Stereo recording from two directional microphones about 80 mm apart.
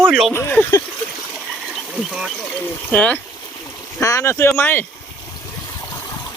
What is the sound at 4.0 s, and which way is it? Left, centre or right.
Speech, left.